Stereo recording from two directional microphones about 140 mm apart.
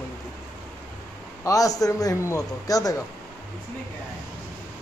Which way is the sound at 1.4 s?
25° left (ahead or behind).